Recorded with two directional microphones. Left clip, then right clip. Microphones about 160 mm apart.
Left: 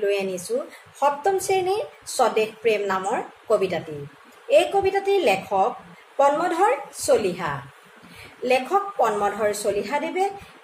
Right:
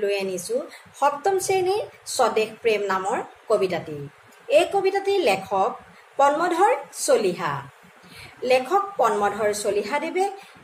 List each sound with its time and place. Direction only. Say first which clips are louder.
0.0 s speech: left 1 dB; centre (ahead or behind)